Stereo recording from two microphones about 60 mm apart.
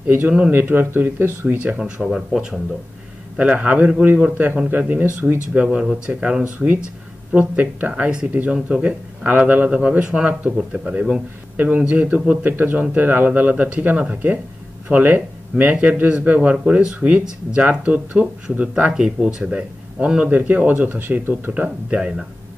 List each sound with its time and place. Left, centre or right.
0.5 s speech: right
1.8 s speech: centre
3.3 s speech: right
8.0 s speech: centre
11.5 s speech: right
12.4 s speech: right
16.5 s speech: centre
21.6 s speech: centre